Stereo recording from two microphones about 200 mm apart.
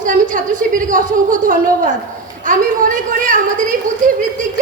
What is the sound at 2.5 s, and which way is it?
Speech, 40° right (ahead or behind).